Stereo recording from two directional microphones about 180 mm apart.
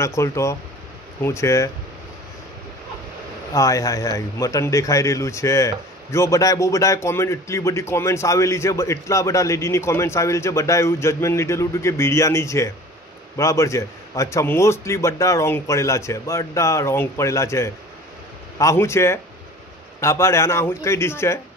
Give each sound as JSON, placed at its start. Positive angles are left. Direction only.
{"t": 0.0, "sound": "speech", "side_deg": 15}
{"t": 3.5, "sound": "speech", "side_deg": 20}